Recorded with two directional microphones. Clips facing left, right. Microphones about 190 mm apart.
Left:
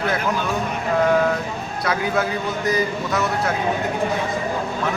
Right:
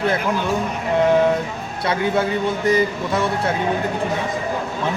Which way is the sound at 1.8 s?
30° right (ahead or behind).